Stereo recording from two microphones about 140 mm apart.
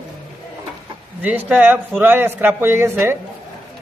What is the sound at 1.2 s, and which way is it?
A man's voice, 10° right (ahead or behind).